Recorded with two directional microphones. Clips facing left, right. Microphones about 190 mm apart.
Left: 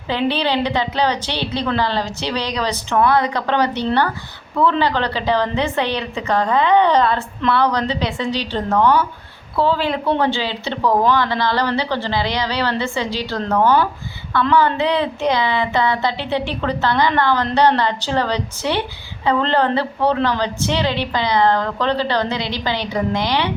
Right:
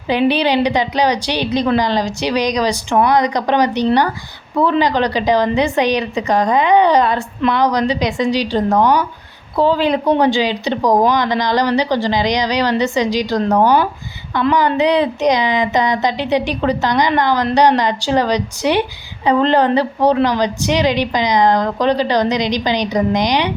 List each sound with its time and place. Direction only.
0.1 s a woman's voice: 15° right (ahead or behind)